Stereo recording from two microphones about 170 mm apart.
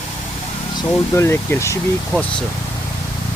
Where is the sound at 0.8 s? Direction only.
15° left (ahead or behind).